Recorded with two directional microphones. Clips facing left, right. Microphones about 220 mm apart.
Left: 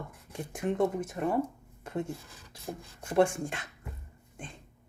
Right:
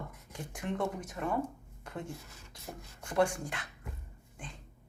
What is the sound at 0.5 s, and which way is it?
Speech, 25° left (ahead or behind).